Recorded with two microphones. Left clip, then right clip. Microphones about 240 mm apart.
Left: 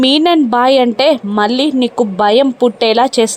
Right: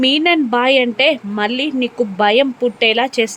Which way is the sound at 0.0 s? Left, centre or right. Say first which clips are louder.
Left 3 dB; centre.